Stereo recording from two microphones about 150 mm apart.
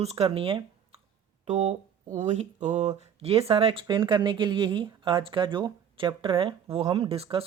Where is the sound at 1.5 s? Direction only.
50° right (ahead or behind).